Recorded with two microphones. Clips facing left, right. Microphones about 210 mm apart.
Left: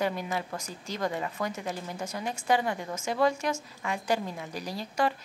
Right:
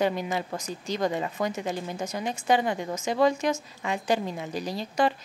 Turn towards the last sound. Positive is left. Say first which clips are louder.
# right 3 dB
turn(degrees=-20)  # may be behind; listen again after turning